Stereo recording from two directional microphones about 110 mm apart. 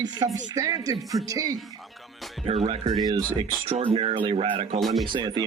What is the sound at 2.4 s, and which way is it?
Speech, 65° right (ahead or behind).